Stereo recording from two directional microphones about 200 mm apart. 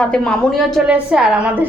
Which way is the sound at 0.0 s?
5° left (ahead or behind).